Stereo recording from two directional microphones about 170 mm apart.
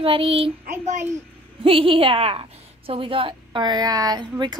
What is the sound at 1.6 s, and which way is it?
A woman's voice, 30° right (ahead or behind).